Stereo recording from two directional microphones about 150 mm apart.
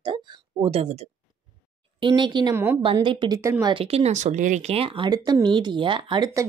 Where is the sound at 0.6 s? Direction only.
40° right (ahead or behind).